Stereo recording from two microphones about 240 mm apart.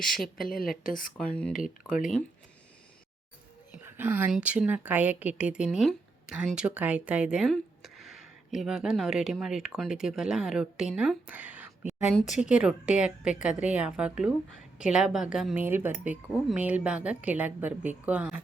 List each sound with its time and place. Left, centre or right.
0.0 s speech: centre
0.3 s speech: left
1.1 s speech: centre
1.5 s speech: left
3.8 s a woman's voice: centre